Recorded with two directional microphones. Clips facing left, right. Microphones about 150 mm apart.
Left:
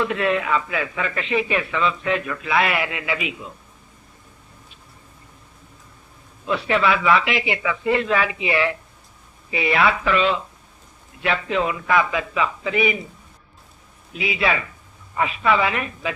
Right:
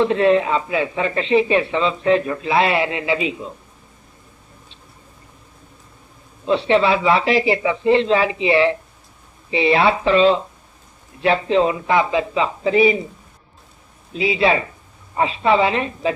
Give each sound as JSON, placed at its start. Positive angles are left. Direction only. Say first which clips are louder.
{"t": 0.0, "sound": "speech", "louder": "right 6 dB", "side_deg": -30}
{"t": 6.4, "sound": "speech", "louder": "right 5 dB", "side_deg": -30}
{"t": 14.1, "sound": "speech", "louder": "right 5 dB", "side_deg": -30}